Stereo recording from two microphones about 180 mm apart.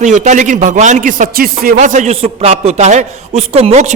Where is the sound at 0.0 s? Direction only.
40° right (ahead or behind).